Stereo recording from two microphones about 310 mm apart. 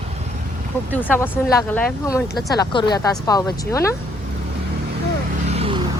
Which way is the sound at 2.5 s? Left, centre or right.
Centre.